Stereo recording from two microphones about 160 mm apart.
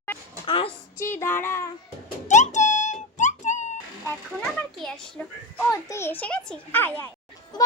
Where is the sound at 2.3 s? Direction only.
50° left (ahead or behind).